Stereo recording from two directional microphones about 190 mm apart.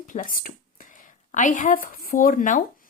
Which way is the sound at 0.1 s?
45° left (ahead or behind).